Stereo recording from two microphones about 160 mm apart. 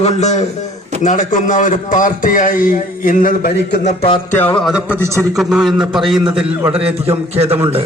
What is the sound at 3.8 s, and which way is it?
Speech, 40° left (ahead or behind).